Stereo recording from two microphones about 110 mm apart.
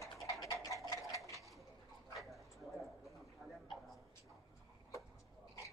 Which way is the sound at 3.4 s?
Centre (ahead or behind).